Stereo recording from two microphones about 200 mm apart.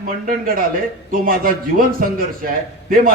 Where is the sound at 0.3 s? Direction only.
45° right (ahead or behind).